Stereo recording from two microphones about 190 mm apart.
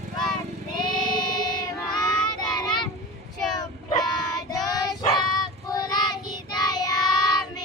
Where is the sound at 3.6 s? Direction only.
20° left (ahead or behind).